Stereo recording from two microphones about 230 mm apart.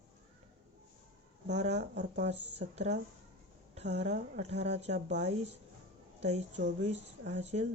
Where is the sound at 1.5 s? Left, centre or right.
Right.